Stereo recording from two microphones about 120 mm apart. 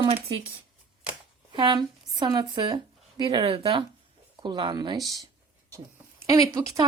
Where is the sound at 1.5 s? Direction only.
35° right (ahead or behind).